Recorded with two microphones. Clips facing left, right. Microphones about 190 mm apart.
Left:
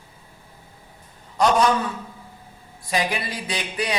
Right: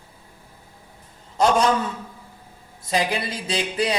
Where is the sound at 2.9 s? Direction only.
25° right (ahead or behind).